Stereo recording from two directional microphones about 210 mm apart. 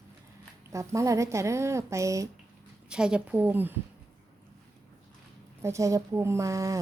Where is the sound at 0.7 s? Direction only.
15° right (ahead or behind).